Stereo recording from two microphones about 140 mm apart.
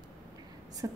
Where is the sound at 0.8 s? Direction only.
25° right (ahead or behind).